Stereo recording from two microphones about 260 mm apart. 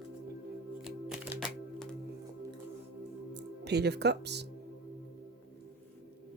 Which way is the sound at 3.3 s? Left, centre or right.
Right.